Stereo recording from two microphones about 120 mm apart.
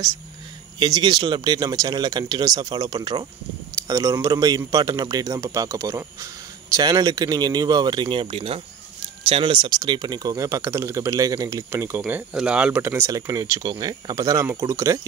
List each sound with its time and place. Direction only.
0.7 s a man's voice: 35° right (ahead or behind); by 8.6 s 50° right (ahead or behind)
9.3 s speech: 40° right (ahead or behind); by 12.0 s 20° right (ahead or behind)
12.1 s speech: 10° right (ahead or behind)
12.8 s a man's voice: 20° right (ahead or behind)